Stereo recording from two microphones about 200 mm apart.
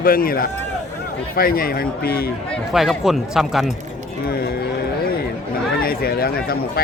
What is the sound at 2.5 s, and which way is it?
Speech, centre (ahead or behind).